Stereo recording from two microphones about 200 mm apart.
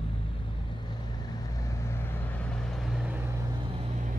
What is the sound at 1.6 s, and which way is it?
Vehicle, 15° left (ahead or behind).